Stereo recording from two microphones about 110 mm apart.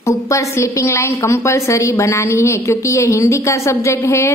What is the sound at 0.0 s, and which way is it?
A woman's voice, 30° left (ahead or behind).